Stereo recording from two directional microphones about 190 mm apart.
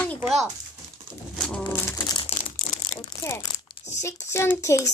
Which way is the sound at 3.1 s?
15° left (ahead or behind).